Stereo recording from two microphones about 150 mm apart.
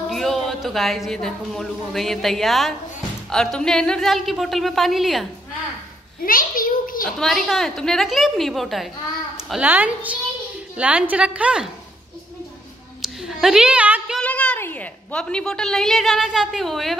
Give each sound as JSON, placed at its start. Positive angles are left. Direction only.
{"t": 0.1, "sound": "a woman's voice", "side_deg": 0}
{"t": 6.2, "sound": "a sound", "side_deg": 65}
{"t": 7.2, "sound": "a woman's voice", "side_deg": 0}
{"t": 9.5, "sound": "a woman's voice", "side_deg": -10}
{"t": 13.0, "sound": "a sound", "side_deg": 0}
{"t": 14.2, "sound": "a woman's voice", "side_deg": 10}